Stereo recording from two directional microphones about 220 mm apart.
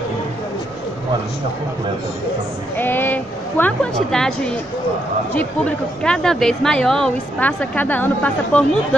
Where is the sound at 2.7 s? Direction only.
10° left (ahead or behind).